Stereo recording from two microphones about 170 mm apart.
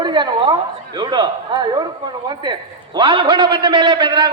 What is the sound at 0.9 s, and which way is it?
Speech, 25° right (ahead or behind).